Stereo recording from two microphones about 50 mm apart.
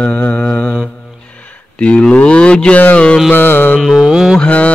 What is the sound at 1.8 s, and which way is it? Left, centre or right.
Mantra, left.